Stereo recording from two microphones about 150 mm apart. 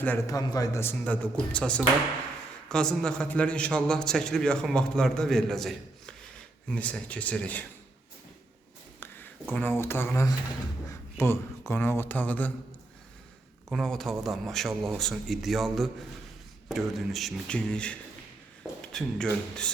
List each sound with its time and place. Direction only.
0.3 s a man's voice: 25° left (ahead or behind)
9.0 s a man's voice: 15° left (ahead or behind)
13.7 s a man's voice: 5° left (ahead or behind)